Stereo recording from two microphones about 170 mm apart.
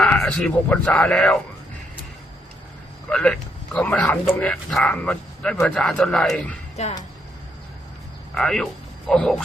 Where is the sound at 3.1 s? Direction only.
5° left (ahead or behind).